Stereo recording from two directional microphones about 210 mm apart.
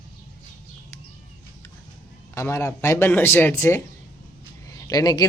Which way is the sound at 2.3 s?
15° left (ahead or behind).